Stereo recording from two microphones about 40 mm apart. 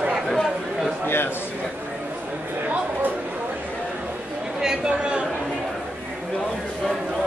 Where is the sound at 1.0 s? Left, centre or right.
Left.